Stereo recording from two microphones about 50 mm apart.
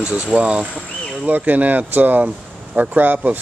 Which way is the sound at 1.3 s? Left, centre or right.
Right.